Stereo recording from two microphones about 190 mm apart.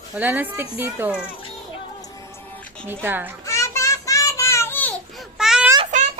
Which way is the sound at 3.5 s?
15° left (ahead or behind).